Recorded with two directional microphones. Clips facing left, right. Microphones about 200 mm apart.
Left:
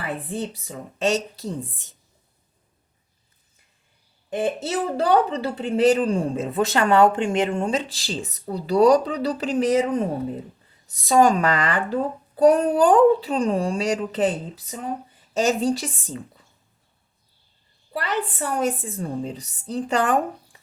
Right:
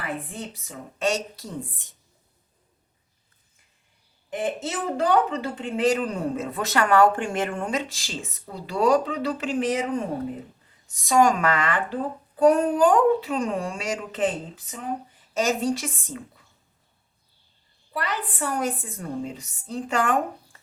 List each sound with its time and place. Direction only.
0.3 s speech: 35° left (ahead or behind)
4.3 s speech: 35° left (ahead or behind)
17.9 s speech: 30° left (ahead or behind)